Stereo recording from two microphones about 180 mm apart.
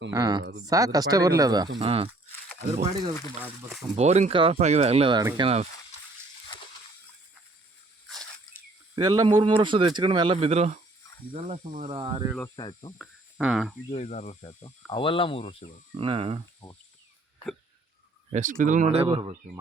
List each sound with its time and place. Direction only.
0.1 s speech: 20° right (ahead or behind)
3.4 s speech: centre (ahead or behind)
3.9 s speech: 40° right (ahead or behind)
8.0 s a sound: centre (ahead or behind)
9.0 s speech: 25° right (ahead or behind)
12.5 s speech: 25° left (ahead or behind)
13.0 s speech: centre (ahead or behind)
13.9 s speech: 40° left (ahead or behind)
14.4 s speech: 25° left (ahead or behind)
16.0 s speech: 30° right (ahead or behind)
18.3 s speech: 45° right (ahead or behind)